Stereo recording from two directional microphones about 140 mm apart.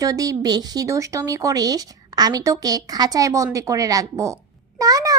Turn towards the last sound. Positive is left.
turn(degrees=-25)  # may be behind; listen again after turning